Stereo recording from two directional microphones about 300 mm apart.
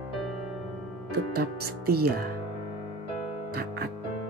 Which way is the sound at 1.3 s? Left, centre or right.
Right.